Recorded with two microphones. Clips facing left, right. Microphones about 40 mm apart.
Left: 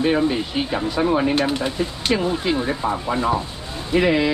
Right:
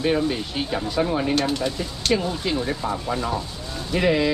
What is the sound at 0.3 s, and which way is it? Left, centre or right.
Speech, centre.